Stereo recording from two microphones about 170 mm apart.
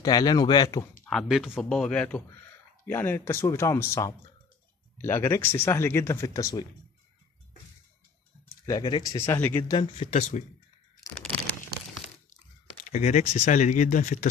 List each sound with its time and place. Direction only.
0.0 s speech: 25° left (ahead or behind)
1.0 s speech: centre (ahead or behind); by 6.6 s 20° left (ahead or behind)
8.6 s speech: 25° left (ahead or behind)
9.2 s speech: 15° left (ahead or behind)
9.8 s speech: 40° left (ahead or behind)
12.9 s speech: 40° left (ahead or behind)